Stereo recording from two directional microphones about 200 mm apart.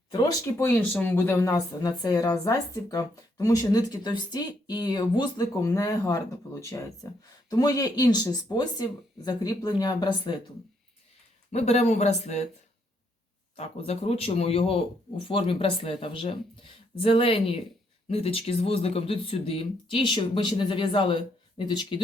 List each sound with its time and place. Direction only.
0.1 s speech: 20° left (ahead or behind)
11.5 s speech: 35° left (ahead or behind)
13.6 s speech: 30° left (ahead or behind)